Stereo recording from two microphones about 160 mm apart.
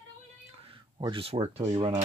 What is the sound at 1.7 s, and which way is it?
Speech, 35° right (ahead or behind).